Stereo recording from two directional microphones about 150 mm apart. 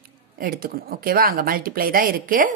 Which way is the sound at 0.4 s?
75° right (ahead or behind).